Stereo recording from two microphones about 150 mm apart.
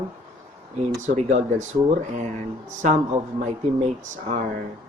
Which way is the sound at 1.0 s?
50° right (ahead or behind).